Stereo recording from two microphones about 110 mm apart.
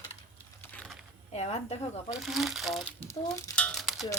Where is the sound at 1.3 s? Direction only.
70° left (ahead or behind).